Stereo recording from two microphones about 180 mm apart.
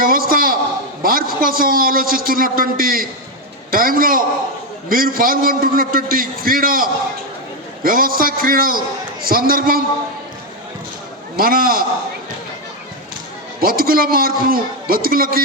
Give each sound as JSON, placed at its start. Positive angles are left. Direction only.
{"t": 0.0, "sound": "a sound", "side_deg": -55}
{"t": 1.0, "sound": "a man's voice", "side_deg": -55}
{"t": 11.3, "sound": "a man's voice", "side_deg": -55}
{"t": 13.6, "sound": "a man's voice", "side_deg": -55}